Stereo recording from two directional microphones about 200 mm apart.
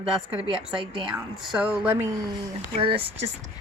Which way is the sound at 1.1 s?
Centre (ahead or behind).